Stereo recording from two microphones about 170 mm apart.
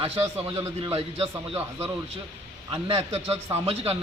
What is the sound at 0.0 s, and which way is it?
A man's voice, 35° right (ahead or behind).